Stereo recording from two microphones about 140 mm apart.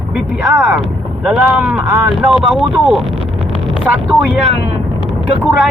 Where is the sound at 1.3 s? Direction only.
5° right (ahead or behind).